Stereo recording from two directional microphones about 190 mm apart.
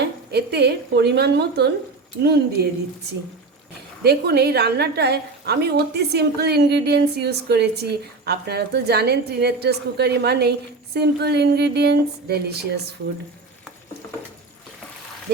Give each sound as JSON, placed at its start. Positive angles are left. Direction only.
{"t": 0.0, "sound": "a woman's voice", "side_deg": -60}
{"t": 4.0, "sound": "a woman's voice", "side_deg": -60}